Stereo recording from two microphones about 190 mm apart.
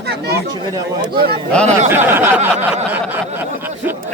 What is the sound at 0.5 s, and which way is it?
Speech, 20° right (ahead or behind).